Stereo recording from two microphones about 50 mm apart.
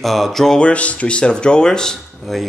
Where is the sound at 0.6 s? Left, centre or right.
Left.